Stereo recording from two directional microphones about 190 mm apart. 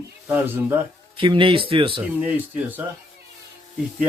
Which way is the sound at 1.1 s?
25° right (ahead or behind).